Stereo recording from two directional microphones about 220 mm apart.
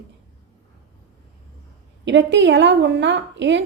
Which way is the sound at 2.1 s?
55° right (ahead or behind).